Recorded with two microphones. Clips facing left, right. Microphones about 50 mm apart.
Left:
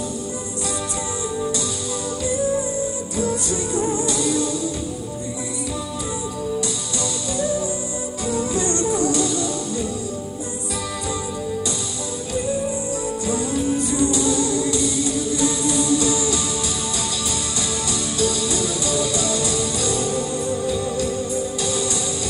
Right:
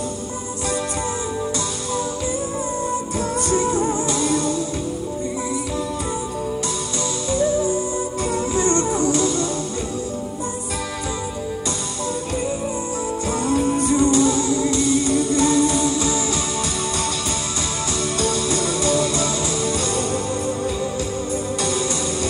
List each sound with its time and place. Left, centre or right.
3.2 s music: right
8.5 s music: right
13.3 s music: right
18.2 s music: right